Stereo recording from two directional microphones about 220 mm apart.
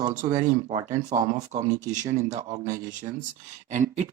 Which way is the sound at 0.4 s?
30° right (ahead or behind).